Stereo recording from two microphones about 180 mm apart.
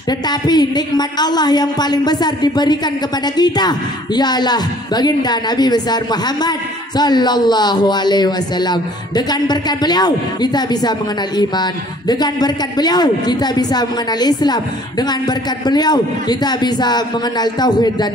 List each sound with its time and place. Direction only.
0.3 s speech: 25° left (ahead or behind)